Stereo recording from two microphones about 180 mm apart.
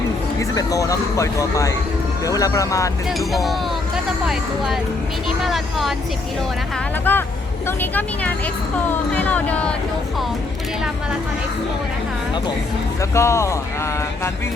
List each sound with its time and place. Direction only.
0.3 s speech: 20° left (ahead or behind)
3.1 s speech: centre (ahead or behind)
7.0 s speech: 10° left (ahead or behind)
13.0 s speech: 15° left (ahead or behind)